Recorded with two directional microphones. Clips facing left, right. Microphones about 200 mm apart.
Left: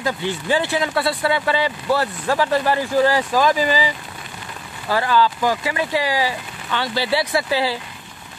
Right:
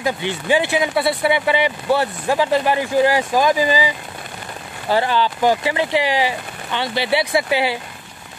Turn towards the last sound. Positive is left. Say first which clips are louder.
# right 2 dB
turn(degrees=-20)  # may be behind; listen again after turning